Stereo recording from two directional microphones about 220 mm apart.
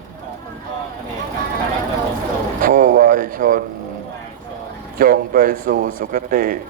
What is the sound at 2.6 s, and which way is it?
A man's voice, 40° right (ahead or behind).